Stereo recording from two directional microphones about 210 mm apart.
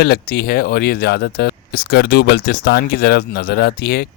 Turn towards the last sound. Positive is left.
turn(degrees=50)  # may be behind; listen again after turning